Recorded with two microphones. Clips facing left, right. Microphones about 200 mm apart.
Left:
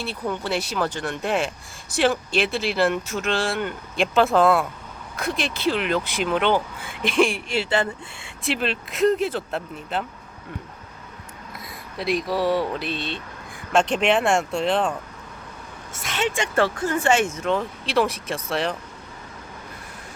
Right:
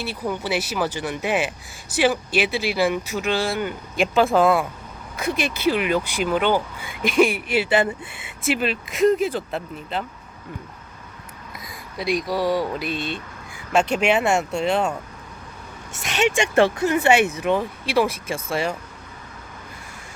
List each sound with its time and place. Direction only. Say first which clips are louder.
0.0 s speech: right 1 dB; 5° right (ahead or behind)
11.5 s speech: right 1 dB; centre (ahead or behind)
12.8 s speech: right 2 dB; 50° right (ahead or behind)
13.7 s speech: even; 5° right (ahead or behind)
16.4 s speech: right 4 dB; 20° right (ahead or behind)
17.2 s speech: right 3 dB; 65° right (ahead or behind)
17.4 s speech: right 2 dB; 10° right (ahead or behind)
18.4 s speech: right 1 dB; centre (ahead or behind)